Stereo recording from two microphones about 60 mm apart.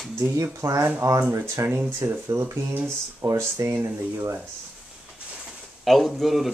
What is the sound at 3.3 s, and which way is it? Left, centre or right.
Speech, right.